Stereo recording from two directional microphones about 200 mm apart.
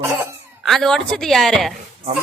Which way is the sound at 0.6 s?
Centre (ahead or behind).